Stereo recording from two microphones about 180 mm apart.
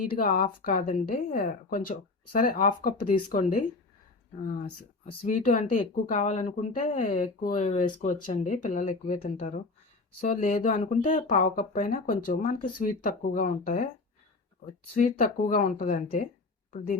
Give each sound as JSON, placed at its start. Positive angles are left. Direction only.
{"t": 0.2, "sound": "speech", "side_deg": 50}
{"t": 5.2, "sound": "speech", "side_deg": 45}
{"t": 14.9, "sound": "speech", "side_deg": 45}